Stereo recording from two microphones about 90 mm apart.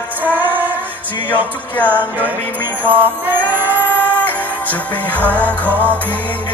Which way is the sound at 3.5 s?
20° right (ahead or behind).